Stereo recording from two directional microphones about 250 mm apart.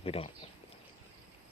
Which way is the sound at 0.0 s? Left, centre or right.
Left.